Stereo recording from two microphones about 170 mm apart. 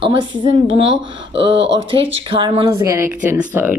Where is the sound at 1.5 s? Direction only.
90° right.